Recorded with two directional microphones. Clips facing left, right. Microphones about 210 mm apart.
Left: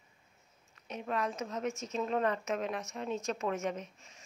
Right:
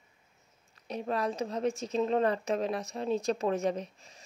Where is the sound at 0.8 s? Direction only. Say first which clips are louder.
Right 3 dB; 35° right (ahead or behind).